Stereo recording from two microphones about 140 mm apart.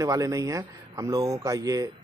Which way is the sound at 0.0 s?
25° right (ahead or behind).